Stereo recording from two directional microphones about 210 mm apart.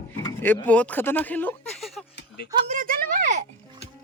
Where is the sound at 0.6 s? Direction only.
5° left (ahead or behind).